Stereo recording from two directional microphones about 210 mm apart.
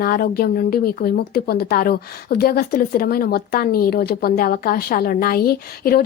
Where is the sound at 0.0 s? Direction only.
45° left (ahead or behind).